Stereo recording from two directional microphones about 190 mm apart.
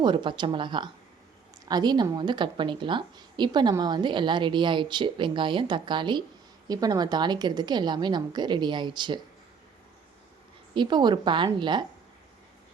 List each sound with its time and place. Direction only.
0.0 s a woman's voice: 25° right (ahead or behind)
10.8 s a woman's voice: 25° right (ahead or behind)